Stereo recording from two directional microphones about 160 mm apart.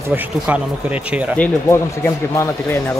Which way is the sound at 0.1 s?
10° right (ahead or behind).